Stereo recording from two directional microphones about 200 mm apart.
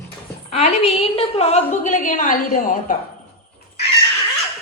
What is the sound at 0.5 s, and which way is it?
A woman's voice, 30° left (ahead or behind).